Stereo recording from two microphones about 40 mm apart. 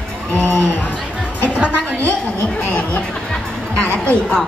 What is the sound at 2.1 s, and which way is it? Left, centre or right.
Speech, left.